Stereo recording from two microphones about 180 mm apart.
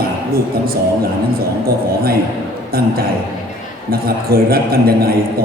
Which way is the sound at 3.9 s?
55° right (ahead or behind).